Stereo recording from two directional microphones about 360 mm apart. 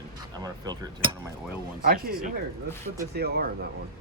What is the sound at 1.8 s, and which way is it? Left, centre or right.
Speech, right.